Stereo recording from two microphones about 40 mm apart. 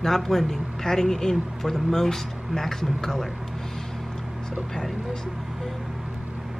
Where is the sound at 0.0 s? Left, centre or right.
Centre.